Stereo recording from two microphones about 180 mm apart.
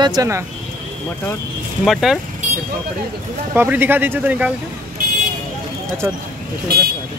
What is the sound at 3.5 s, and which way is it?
Speech, 10° right (ahead or behind).